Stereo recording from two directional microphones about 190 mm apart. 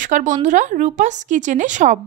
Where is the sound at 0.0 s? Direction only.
40° right (ahead or behind).